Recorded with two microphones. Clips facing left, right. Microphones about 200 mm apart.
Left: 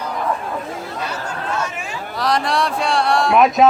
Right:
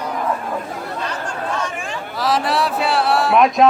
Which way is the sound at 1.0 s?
5° left (ahead or behind).